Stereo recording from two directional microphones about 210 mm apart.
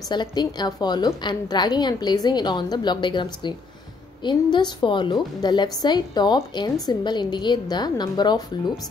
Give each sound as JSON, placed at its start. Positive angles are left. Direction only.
{"t": 0.1, "sound": "a woman's voice", "side_deg": 20}